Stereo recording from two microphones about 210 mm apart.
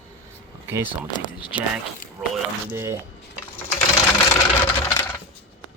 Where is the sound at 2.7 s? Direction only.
10° right (ahead or behind).